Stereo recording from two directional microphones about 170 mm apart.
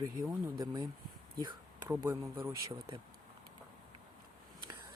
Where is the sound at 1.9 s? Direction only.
15° right (ahead or behind).